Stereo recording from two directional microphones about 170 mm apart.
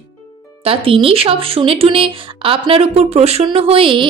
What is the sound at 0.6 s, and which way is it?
Speech, 35° right (ahead or behind).